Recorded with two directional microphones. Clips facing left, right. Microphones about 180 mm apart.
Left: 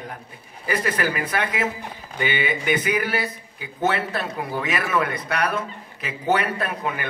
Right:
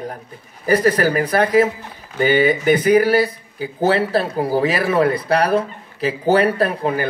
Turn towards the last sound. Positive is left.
turn(degrees=-35)  # may be behind; listen again after turning